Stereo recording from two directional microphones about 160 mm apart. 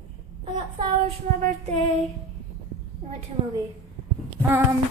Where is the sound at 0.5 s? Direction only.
30° right (ahead or behind).